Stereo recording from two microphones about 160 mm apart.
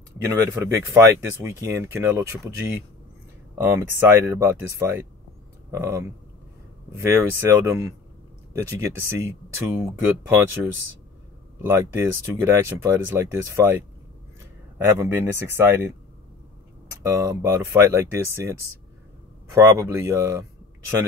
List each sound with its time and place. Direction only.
0.2 s speech: 20° right (ahead or behind)
14.8 s speech: 15° right (ahead or behind)
17.0 s speech: 20° right (ahead or behind)